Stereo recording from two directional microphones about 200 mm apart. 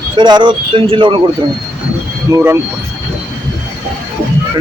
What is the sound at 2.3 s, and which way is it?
Speech, 10° right (ahead or behind).